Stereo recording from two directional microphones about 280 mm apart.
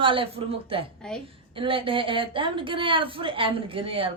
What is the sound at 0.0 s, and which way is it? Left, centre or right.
A man's voice, centre.